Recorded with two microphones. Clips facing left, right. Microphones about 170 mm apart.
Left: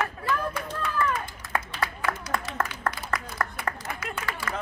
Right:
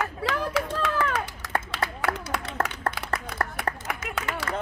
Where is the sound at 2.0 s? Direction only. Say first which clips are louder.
Right 1 dB; 75° right (ahead or behind).